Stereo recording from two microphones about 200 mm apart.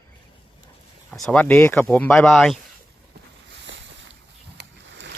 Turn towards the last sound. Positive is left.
turn(degrees=-60)  # may be behind; listen again after turning